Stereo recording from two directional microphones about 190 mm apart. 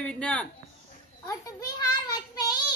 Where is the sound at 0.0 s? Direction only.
5° left (ahead or behind).